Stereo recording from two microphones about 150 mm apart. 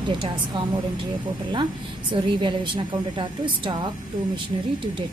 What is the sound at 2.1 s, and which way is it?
Speech, 30° right (ahead or behind).